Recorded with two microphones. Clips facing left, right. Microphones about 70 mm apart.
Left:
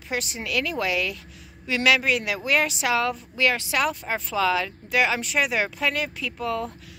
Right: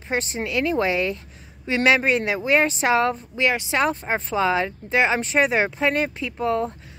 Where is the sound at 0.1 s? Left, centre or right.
Right.